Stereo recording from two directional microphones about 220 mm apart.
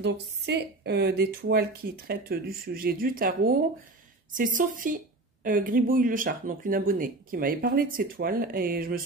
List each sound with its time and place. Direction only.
0.0 s a woman's voice: 50° right (ahead or behind)